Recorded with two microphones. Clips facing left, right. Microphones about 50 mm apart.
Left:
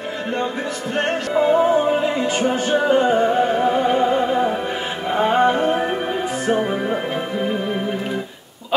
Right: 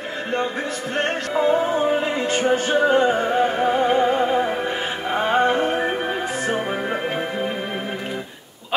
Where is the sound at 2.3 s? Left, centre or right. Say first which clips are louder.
Even; right.